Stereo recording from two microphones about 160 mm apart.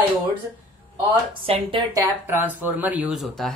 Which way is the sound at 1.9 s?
20° right (ahead or behind).